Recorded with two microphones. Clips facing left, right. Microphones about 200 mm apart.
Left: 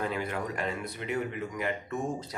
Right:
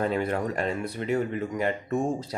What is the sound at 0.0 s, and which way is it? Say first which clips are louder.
Speech: right 6 dB; 35° right (ahead or behind).